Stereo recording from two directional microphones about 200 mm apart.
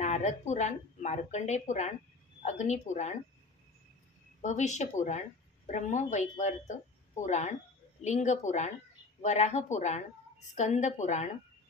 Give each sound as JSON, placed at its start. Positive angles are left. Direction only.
{"t": 0.0, "sound": "speech", "side_deg": 35}
{"t": 4.4, "sound": "speech", "side_deg": 35}